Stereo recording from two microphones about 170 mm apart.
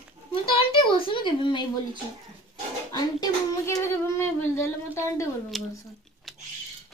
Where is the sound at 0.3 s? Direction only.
35° left (ahead or behind).